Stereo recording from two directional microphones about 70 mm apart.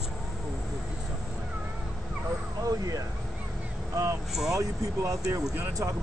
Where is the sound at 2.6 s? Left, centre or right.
Right.